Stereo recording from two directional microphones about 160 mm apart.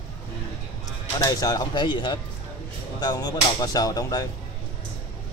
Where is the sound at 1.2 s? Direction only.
25° left (ahead or behind).